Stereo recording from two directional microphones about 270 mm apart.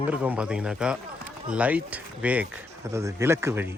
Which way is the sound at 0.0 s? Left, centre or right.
Centre.